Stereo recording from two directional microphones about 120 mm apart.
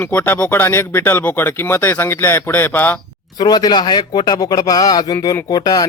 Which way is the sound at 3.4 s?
35° left (ahead or behind).